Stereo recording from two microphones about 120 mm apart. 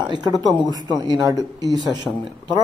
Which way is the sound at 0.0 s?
35° right (ahead or behind).